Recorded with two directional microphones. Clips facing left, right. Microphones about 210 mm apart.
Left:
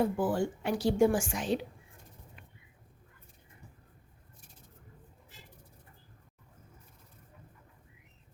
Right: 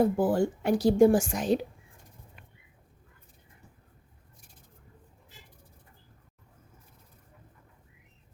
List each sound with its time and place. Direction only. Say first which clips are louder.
0.0 s a woman's voice: right 5 dB; 40° right (ahead or behind)